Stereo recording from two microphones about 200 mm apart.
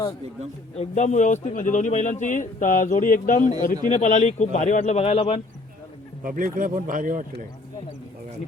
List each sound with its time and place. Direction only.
0.8 s a man's voice: 35° left (ahead or behind)
6.2 s speech: 45° right (ahead or behind)